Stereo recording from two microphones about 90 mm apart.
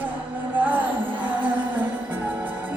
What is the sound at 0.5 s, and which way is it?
Music, 20° right (ahead or behind).